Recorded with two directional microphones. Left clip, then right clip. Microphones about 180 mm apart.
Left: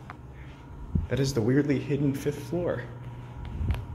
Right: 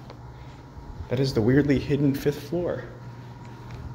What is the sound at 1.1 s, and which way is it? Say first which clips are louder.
Speech: right 3 dB; 5° right (ahead or behind).